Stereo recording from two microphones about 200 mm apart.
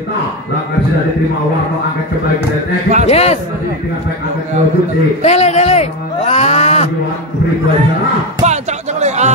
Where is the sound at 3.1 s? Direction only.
35° left (ahead or behind).